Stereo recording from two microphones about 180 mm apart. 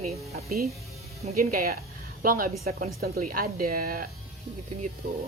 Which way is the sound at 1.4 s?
55° right (ahead or behind).